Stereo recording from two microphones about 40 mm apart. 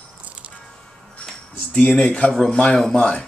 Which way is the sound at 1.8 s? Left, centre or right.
Left.